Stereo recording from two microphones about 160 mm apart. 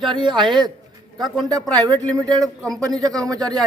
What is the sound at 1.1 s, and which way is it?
Speech, centre (ahead or behind).